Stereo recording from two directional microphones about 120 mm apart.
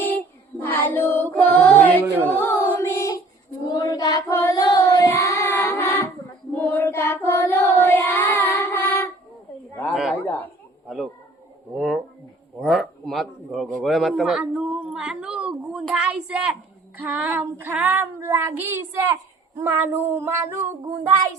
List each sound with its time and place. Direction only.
0.6 s child singing: 15° left (ahead or behind)
2.0 s speech: 15° right (ahead or behind)
2.4 s child singing: 20° left (ahead or behind)
3.7 s female singing: 35° left (ahead or behind)
4.3 s child singing: 25° left (ahead or behind)
9.9 s a sound: 10° right (ahead or behind)
10.2 s a sound: 15° left (ahead or behind)
10.8 s a sound: centre (ahead or behind)
17.0 s child singing: 15° right (ahead or behind)